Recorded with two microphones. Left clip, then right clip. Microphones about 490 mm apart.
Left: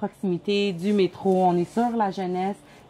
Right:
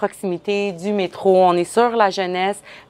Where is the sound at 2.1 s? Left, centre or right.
Right.